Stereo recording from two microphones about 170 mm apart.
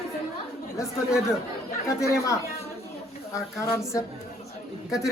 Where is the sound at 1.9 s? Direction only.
15° left (ahead or behind).